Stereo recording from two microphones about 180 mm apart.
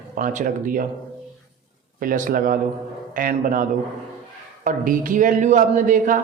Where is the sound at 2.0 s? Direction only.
50° right (ahead or behind).